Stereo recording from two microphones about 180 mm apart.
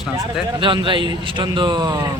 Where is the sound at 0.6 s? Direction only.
25° right (ahead or behind).